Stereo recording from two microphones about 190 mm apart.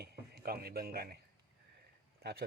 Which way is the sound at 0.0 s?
55° right (ahead or behind).